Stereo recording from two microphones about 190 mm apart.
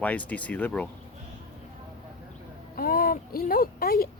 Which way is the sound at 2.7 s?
50° left (ahead or behind).